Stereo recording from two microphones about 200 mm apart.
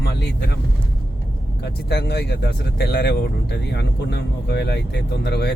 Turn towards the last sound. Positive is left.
turn(degrees=55)  # may be behind; listen again after turning